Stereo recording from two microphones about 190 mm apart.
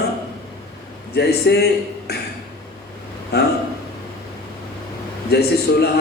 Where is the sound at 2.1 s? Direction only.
55° left (ahead or behind).